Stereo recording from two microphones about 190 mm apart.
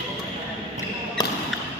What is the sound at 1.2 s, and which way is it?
Basketball bounce, 20° left (ahead or behind).